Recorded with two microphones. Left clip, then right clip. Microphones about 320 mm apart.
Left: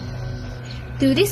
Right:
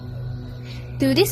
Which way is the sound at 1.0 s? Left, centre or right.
Right.